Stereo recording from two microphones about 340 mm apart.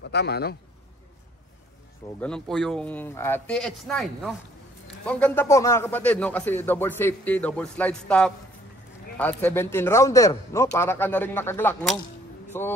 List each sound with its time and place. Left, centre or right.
0.0 s a man's voice: left
2.1 s a man's voice: centre